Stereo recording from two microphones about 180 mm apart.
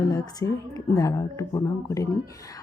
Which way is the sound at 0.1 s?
20° left (ahead or behind).